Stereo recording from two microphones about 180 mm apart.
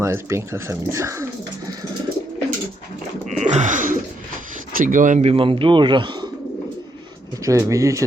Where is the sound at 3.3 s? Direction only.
40° right (ahead or behind).